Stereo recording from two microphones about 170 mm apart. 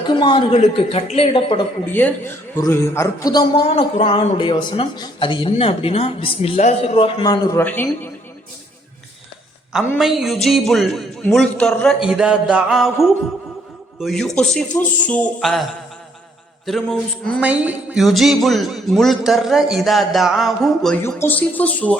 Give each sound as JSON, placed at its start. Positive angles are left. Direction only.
{"t": 0.1, "sound": "speech", "side_deg": 25}
{"t": 1.9, "sound": "a man's voice", "side_deg": 10}
{"t": 3.8, "sound": "speech", "side_deg": 35}
{"t": 7.5, "sound": "a man's voice", "side_deg": 10}
{"t": 10.0, "sound": "a man's voice", "side_deg": 0}
{"t": 16.6, "sound": "a man's voice", "side_deg": 0}
{"t": 17.4, "sound": "a man's voice", "side_deg": -10}